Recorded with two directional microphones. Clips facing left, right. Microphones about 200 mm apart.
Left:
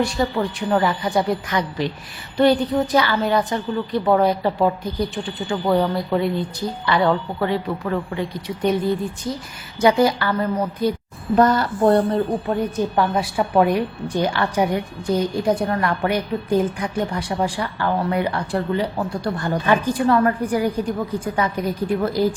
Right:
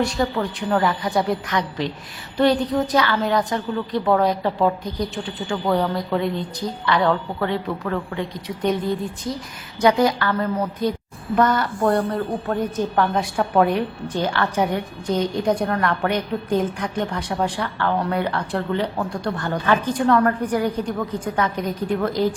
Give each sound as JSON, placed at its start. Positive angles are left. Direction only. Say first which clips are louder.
{"t": 0.0, "sound": "a woman's voice", "louder": "left 1 dB", "side_deg": 0}
{"t": 9.8, "sound": "a woman's voice", "louder": "left 1 dB", "side_deg": 5}
{"t": 11.3, "sound": "speech", "louder": "left 3 dB", "side_deg": 35}
{"t": 12.5, "sound": "a woman's voice", "louder": "left 1 dB", "side_deg": 10}